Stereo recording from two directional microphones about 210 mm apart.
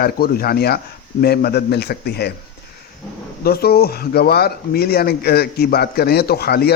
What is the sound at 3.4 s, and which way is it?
A man's voice, 50° left (ahead or behind).